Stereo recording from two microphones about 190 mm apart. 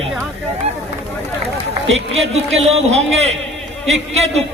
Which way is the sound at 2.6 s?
35° right (ahead or behind).